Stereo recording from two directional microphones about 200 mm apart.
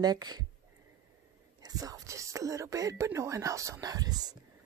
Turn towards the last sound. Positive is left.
turn(degrees=-20)  # may be behind; listen again after turning